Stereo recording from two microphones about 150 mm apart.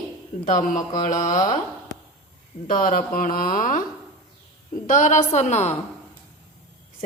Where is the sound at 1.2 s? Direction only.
55° left (ahead or behind).